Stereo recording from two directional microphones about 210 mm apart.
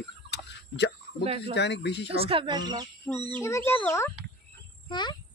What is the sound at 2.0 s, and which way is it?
Speech, 25° right (ahead or behind).